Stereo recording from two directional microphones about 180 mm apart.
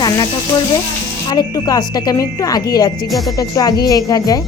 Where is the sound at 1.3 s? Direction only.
20° left (ahead or behind).